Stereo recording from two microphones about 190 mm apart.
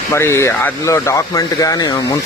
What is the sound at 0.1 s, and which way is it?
A man's voice, 15° left (ahead or behind).